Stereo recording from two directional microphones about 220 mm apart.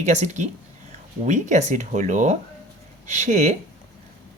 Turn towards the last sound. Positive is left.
turn(degrees=-30)  # may be behind; listen again after turning